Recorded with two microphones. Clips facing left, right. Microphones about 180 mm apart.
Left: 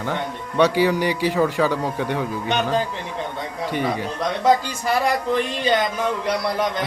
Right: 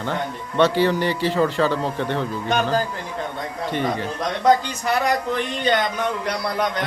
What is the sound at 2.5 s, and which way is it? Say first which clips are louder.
A man's voice: right 1 dB; centre (ahead or behind).